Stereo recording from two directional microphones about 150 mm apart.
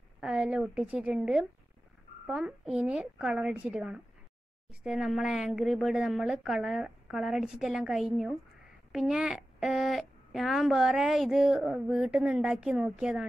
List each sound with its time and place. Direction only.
0.2 s speech: 5° right (ahead or behind)